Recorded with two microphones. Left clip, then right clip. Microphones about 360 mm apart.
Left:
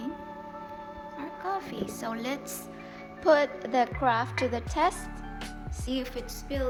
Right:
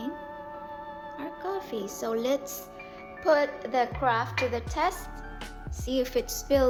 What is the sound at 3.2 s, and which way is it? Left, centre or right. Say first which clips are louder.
Speech: left 1 dB; left.